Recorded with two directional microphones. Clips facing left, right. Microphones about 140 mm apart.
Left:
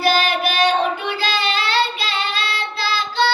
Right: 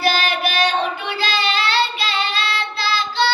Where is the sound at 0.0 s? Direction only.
45° left (ahead or behind).